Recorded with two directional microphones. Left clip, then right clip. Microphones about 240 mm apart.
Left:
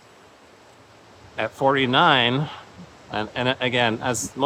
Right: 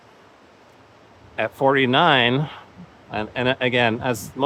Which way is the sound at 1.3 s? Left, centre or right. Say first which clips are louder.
Right 2 dB; centre.